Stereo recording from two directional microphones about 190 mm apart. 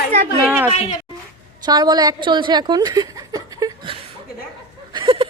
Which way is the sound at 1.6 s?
20° right (ahead or behind).